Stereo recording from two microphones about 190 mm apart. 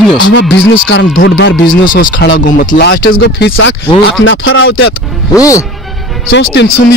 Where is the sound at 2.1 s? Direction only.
80° left.